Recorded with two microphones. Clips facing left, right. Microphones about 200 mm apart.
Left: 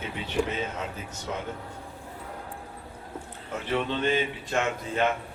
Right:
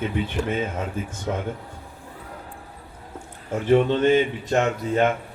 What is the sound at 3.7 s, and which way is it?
Speech, 45° right (ahead or behind).